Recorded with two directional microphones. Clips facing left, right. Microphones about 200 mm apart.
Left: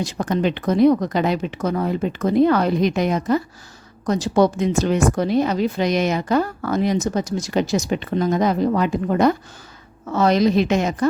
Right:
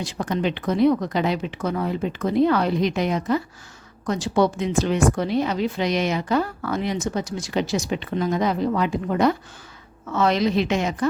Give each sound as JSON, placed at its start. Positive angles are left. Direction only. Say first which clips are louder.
{"t": 0.0, "sound": "a woman's voice", "louder": "left 3 dB", "side_deg": 45}